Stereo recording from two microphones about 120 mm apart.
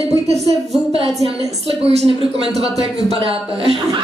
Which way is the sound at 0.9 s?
55° right (ahead or behind).